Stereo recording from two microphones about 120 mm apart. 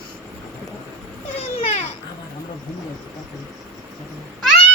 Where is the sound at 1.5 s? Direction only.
60° left (ahead or behind).